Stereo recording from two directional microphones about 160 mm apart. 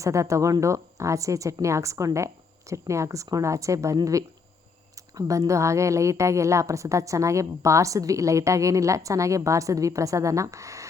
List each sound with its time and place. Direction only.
0.0 s a woman's voice: 20° right (ahead or behind)